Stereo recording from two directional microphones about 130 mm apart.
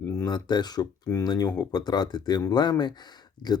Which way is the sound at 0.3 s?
35° left (ahead or behind).